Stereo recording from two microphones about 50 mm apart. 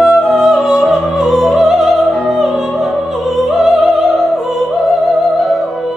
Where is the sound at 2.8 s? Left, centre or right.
Centre.